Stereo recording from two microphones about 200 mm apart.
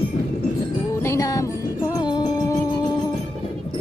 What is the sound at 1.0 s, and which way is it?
Music, 15° left (ahead or behind).